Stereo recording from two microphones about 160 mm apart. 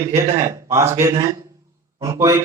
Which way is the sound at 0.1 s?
15° right (ahead or behind).